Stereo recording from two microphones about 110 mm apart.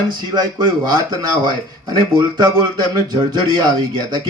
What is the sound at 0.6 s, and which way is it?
Speech, 40° right (ahead or behind).